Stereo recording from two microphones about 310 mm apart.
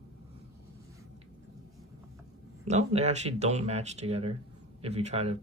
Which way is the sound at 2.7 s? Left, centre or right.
Right.